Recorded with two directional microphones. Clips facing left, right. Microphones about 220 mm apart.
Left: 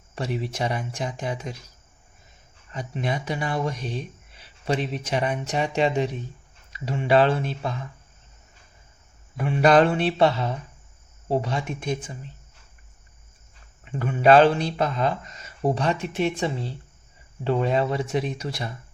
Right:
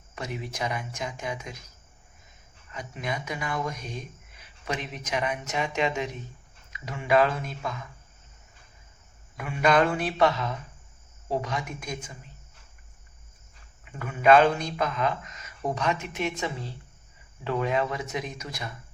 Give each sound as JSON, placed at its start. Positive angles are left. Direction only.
{"t": 0.2, "sound": "speech", "side_deg": 35}
{"t": 2.7, "sound": "speech", "side_deg": 30}
{"t": 9.4, "sound": "speech", "side_deg": 35}
{"t": 13.9, "sound": "speech", "side_deg": 30}